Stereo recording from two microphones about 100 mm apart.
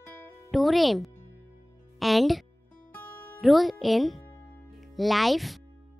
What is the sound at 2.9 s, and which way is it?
Music, 25° left (ahead or behind).